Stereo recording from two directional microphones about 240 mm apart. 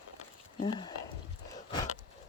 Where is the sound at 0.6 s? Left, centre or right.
Centre.